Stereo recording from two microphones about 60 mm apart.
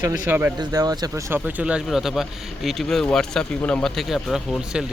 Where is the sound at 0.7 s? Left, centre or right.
Right.